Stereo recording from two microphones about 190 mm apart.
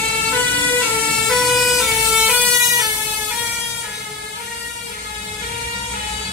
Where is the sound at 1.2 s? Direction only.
Centre (ahead or behind).